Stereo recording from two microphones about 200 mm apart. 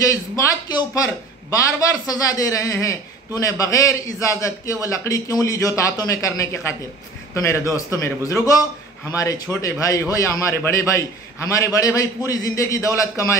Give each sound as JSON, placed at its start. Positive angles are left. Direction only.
{"t": 0.1, "sound": "a man's voice", "side_deg": 15}